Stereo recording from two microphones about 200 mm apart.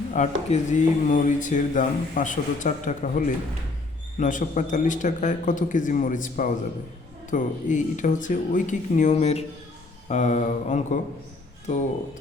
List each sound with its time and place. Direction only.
0.1 s speech: 40° left (ahead or behind)